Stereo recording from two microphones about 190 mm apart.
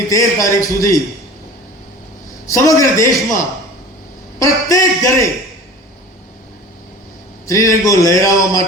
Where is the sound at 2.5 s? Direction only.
15° left (ahead or behind).